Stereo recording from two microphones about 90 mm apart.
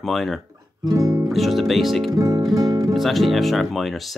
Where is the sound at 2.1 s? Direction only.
45° right (ahead or behind).